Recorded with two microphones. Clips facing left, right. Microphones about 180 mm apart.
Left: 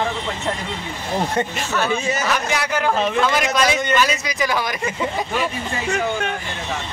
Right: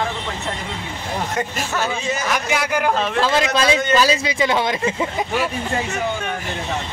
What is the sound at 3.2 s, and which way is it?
A man's voice, 30° right (ahead or behind).